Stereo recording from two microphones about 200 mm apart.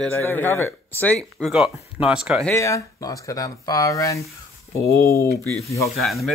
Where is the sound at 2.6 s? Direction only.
15° left (ahead or behind).